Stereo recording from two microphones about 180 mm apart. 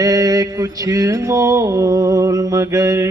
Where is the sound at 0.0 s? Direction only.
20° right (ahead or behind).